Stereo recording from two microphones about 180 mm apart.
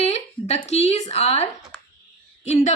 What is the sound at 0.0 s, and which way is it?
A woman's voice, 40° left (ahead or behind).